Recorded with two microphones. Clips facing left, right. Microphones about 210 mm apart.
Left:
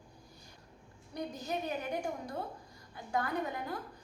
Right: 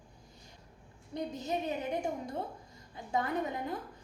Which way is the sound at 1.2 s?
25° right (ahead or behind).